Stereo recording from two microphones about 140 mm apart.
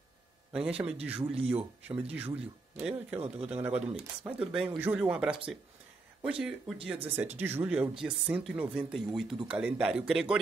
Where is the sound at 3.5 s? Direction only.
10° right (ahead or behind).